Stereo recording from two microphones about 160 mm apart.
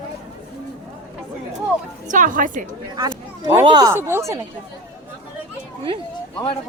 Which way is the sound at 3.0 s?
25° right (ahead or behind).